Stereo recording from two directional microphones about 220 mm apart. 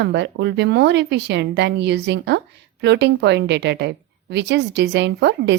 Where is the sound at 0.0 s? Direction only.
50° right (ahead or behind).